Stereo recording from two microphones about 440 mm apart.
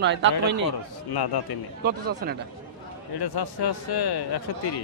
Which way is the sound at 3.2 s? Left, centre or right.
Left.